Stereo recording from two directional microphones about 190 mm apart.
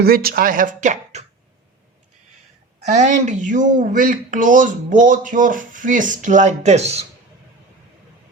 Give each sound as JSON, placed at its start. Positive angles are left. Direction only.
{"t": 0.0, "sound": "speech", "side_deg": -55}
{"t": 2.9, "sound": "speech", "side_deg": -40}